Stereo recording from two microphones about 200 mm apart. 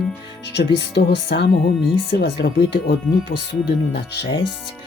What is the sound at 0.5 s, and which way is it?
Speech, 55° left (ahead or behind).